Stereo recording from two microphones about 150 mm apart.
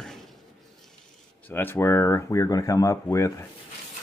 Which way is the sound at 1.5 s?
15° left (ahead or behind).